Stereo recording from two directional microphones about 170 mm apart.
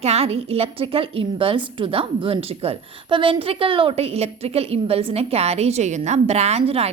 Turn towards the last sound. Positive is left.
turn(degrees=-35)  # may be behind; listen again after turning